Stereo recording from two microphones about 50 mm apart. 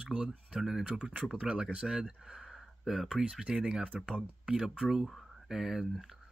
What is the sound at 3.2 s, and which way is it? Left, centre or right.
Speech, centre.